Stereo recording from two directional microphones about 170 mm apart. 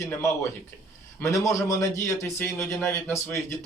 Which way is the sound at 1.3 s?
20° left (ahead or behind).